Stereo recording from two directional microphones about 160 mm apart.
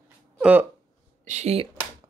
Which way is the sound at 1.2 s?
45° right (ahead or behind).